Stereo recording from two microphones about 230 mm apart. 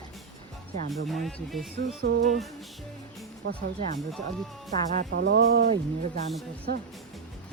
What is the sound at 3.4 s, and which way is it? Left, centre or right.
Speech, right.